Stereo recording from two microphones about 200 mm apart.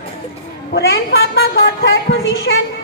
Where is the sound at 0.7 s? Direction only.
60° left (ahead or behind).